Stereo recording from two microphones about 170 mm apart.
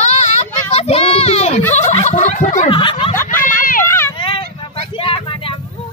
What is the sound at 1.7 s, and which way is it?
Turkey, 45° left (ahead or behind).